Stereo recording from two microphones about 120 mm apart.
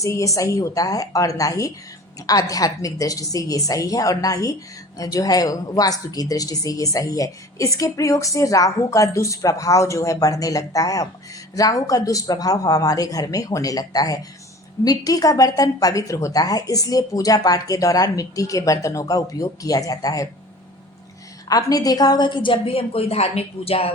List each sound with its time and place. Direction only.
0.0 s a woman's voice: 25° left (ahead or behind)
21.5 s a woman's voice: 30° left (ahead or behind); by 23.9 s 55° left (ahead or behind)